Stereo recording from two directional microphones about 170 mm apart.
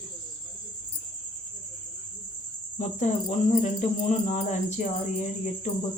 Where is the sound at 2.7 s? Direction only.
45° left (ahead or behind).